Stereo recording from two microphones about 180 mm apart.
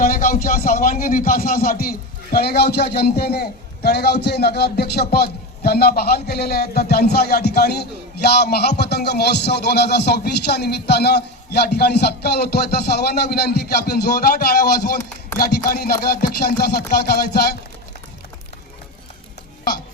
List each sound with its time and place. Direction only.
0.0 s speech: 50° left (ahead or behind)